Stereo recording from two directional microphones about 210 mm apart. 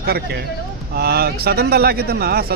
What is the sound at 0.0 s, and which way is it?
A man's voice, 50° right (ahead or behind).